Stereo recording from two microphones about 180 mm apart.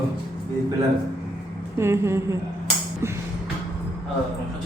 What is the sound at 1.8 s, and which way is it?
Speech, 15° right (ahead or behind).